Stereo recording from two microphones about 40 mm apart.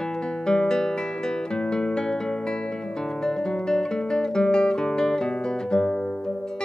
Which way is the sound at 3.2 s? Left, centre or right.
Centre.